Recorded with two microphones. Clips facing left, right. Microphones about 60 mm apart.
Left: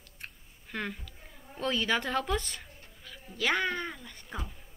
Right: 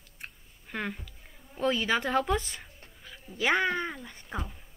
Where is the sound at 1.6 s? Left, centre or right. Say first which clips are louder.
Right 2 dB; centre.